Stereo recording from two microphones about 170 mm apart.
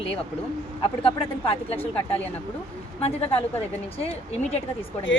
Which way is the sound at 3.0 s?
35° left (ahead or behind).